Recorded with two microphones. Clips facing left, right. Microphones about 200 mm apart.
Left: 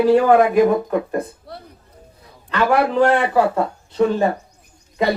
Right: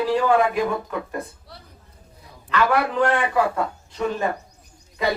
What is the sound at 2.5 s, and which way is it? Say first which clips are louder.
Speech: left 4 dB; 30° left (ahead or behind).